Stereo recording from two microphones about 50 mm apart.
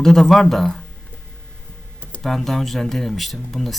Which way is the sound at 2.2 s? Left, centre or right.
Centre.